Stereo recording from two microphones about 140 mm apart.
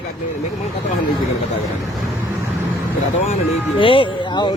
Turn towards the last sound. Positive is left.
turn(degrees=35)  # may be behind; listen again after turning